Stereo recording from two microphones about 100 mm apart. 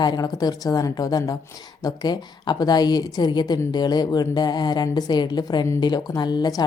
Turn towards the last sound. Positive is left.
turn(degrees=45)  # may be behind; listen again after turning